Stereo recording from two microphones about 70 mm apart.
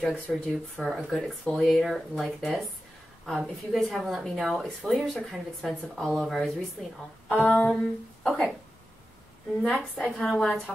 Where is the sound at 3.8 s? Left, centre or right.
Centre.